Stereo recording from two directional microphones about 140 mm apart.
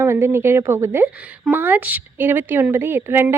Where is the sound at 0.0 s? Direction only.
15° right (ahead or behind).